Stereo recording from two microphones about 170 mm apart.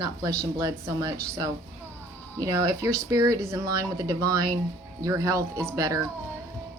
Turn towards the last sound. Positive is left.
turn(degrees=-20)  # may be behind; listen again after turning